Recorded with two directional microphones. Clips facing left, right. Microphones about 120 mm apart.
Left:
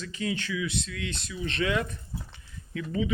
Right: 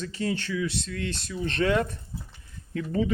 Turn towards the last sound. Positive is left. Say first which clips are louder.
# right 3 dB
turn(degrees=-45)  # may be behind; listen again after turning